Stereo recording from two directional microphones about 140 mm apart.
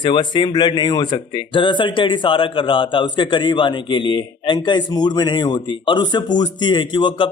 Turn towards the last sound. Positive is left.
turn(degrees=35)  # may be behind; listen again after turning